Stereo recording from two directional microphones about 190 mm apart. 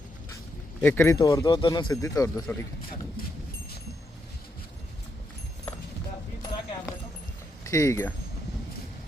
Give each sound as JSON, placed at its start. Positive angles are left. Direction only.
{"t": 0.8, "sound": "speech", "side_deg": 10}
{"t": 7.6, "sound": "speech", "side_deg": 15}